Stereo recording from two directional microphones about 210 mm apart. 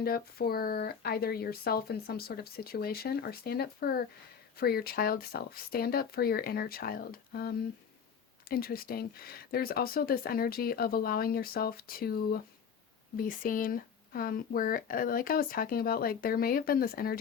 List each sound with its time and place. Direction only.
0.0 s speech: 45° left (ahead or behind)